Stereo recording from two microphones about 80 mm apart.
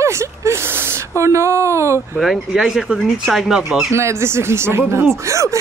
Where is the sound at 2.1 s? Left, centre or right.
Centre.